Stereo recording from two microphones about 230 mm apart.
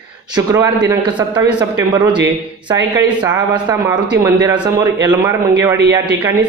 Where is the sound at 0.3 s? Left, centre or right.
Centre.